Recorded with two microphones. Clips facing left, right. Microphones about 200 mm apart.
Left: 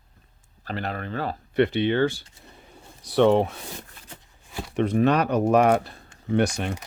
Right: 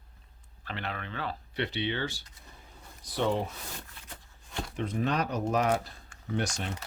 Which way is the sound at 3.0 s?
70° left (ahead or behind).